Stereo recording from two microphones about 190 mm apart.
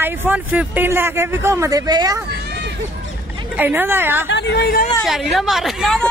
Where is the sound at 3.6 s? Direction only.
10° right (ahead or behind).